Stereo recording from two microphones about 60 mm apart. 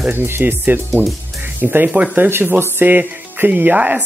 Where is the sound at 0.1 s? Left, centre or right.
Right.